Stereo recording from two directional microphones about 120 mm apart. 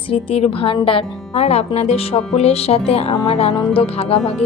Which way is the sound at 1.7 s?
55° left (ahead or behind).